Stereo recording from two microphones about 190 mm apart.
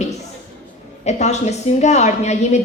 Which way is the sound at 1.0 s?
35° left (ahead or behind).